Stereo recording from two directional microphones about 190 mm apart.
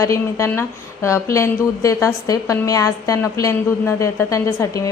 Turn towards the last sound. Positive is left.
turn(degrees=15)  # may be behind; listen again after turning